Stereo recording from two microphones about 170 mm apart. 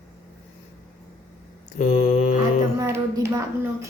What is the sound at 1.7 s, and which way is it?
Mantra, 45° left (ahead or behind).